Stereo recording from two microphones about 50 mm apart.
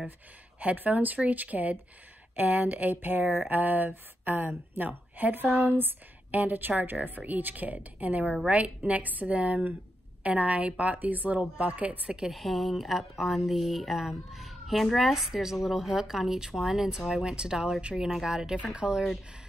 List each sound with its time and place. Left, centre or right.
0.6 s a woman's voice: right
12.3 s speech: centre